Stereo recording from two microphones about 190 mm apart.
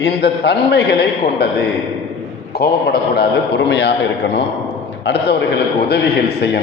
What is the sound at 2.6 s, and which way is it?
A man's voice, 55° left (ahead or behind).